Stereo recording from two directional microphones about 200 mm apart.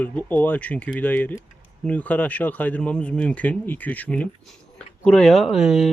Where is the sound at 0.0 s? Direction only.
10° left (ahead or behind).